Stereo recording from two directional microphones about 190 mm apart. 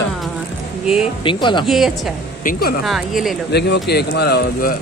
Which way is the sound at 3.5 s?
60° left (ahead or behind).